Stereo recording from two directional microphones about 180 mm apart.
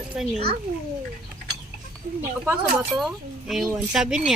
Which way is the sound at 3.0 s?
Centre (ahead or behind).